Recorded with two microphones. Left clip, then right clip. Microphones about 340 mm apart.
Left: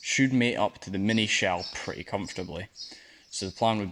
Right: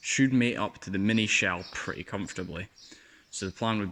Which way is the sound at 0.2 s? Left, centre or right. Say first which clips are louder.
Left 2 dB; centre.